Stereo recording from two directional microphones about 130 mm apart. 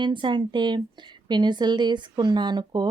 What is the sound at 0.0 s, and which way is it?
Speech, 40° right (ahead or behind).